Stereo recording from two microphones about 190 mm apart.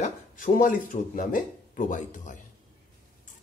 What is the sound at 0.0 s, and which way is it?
Speech, 45° left (ahead or behind).